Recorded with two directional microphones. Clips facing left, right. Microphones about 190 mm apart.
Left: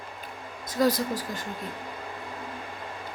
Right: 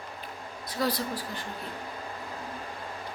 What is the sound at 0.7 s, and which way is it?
Speech, 45° left (ahead or behind).